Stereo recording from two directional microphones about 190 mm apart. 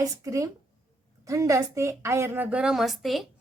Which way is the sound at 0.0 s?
15° right (ahead or behind).